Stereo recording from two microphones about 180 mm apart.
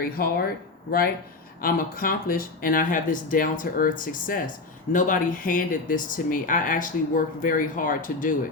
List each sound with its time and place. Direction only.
0.0 s speech: 55° left (ahead or behind)